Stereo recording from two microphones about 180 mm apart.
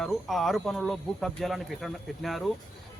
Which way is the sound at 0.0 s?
Centre (ahead or behind).